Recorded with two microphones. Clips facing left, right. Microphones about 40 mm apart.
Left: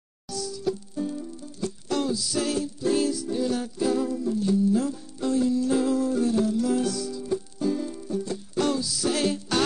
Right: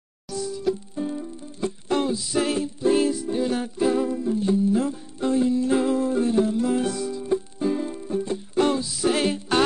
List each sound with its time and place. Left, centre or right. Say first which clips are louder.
0.3 s music: right 3 dB; right